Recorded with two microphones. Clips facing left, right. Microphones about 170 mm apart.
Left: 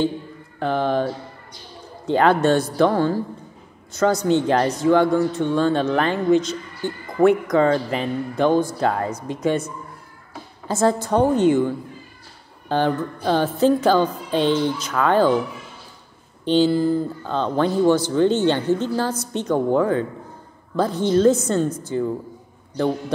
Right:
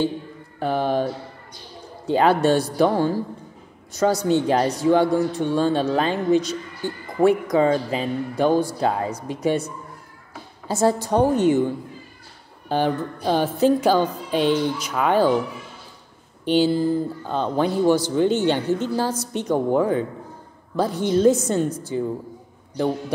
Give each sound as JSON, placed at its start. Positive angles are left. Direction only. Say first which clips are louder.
{"t": 0.6, "sound": "a woman's voice", "louder": "left 1 dB", "side_deg": -10}
{"t": 10.7, "sound": "a woman's voice", "louder": "left 1 dB", "side_deg": -15}
{"t": 16.4, "sound": "a woman's voice", "louder": "left 1 dB", "side_deg": -10}